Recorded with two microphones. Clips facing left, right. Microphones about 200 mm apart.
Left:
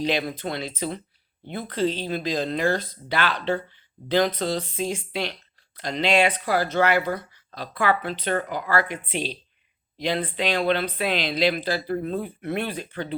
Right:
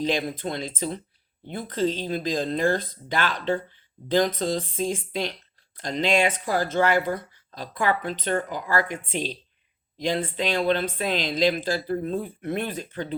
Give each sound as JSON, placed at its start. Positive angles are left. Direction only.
{"t": 0.0, "sound": "speech", "side_deg": -45}